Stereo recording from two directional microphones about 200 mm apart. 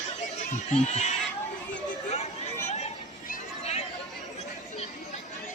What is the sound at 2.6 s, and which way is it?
Chatter, 35° left (ahead or behind).